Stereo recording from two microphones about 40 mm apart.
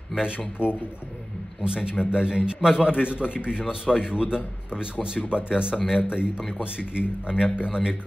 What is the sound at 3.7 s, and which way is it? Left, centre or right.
A man's voice, right.